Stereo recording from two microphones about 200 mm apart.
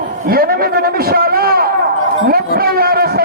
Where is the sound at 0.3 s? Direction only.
50° right (ahead or behind).